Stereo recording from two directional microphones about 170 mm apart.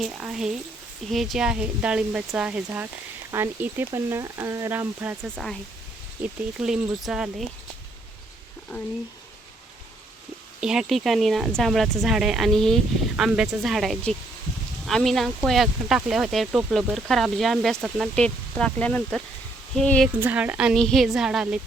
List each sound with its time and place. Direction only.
0.0 s speech: 5° right (ahead or behind)
5.4 s speech: centre (ahead or behind)
10.6 s speech: 5° right (ahead or behind)
20.1 s speech: 10° right (ahead or behind)